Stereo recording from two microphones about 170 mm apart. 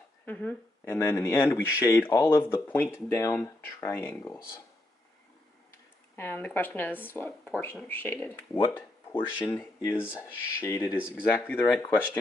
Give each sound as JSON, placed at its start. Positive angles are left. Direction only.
{"t": 0.2, "sound": "speech", "side_deg": 10}
{"t": 6.1, "sound": "speech", "side_deg": 10}
{"t": 9.1, "sound": "speech", "side_deg": 30}
{"t": 9.5, "sound": "speech", "side_deg": 15}
{"t": 9.9, "sound": "speech", "side_deg": -5}
{"t": 10.2, "sound": "speech", "side_deg": 20}
{"t": 11.0, "sound": "speech", "side_deg": -5}
{"t": 11.3, "sound": "speech", "side_deg": 10}